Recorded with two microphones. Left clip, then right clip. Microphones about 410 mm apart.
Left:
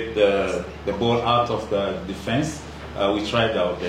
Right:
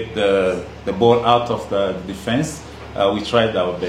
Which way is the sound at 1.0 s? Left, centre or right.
Right.